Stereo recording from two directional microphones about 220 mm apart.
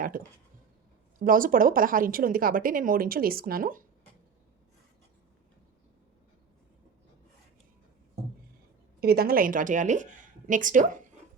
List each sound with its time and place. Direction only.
1.2 s speech: 40° right (ahead or behind)
9.0 s speech: 45° right (ahead or behind)